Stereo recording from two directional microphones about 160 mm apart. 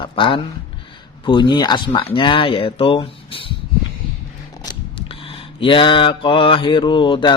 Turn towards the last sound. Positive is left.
turn(degrees=30)  # may be behind; listen again after turning